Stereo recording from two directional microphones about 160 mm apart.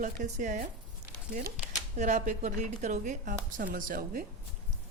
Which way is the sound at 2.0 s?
50° right (ahead or behind).